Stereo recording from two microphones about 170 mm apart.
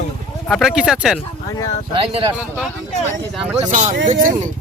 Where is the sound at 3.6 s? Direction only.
45° right (ahead or behind).